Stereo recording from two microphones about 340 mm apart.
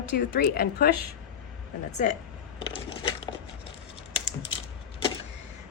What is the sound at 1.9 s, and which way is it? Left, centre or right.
Speech, centre.